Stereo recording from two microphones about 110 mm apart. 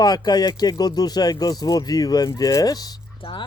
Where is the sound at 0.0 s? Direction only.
35° left (ahead or behind).